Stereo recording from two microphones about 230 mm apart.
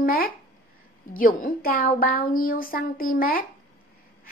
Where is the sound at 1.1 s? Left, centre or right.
Left.